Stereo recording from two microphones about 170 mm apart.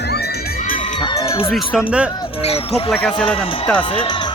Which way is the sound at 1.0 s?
20° left (ahead or behind).